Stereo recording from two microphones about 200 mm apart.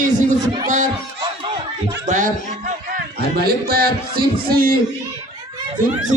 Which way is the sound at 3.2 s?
50° right (ahead or behind).